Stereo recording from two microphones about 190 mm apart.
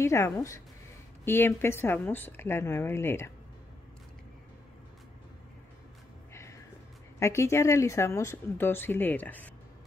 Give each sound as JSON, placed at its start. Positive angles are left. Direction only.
{"t": 0.0, "sound": "speech", "side_deg": 15}
{"t": 6.3, "sound": "a sound", "side_deg": 15}
{"t": 7.2, "sound": "speech", "side_deg": 15}